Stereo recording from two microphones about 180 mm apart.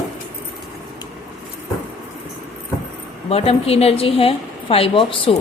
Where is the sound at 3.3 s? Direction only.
35° left (ahead or behind).